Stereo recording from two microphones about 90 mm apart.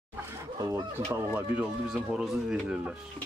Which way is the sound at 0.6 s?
45° right (ahead or behind).